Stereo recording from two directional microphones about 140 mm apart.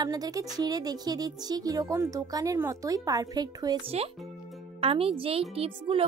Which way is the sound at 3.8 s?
45° right (ahead or behind).